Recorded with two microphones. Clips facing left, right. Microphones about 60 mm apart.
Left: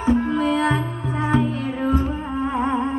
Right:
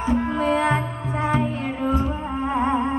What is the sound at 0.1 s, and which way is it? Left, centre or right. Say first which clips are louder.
Music: left 2 dB; right.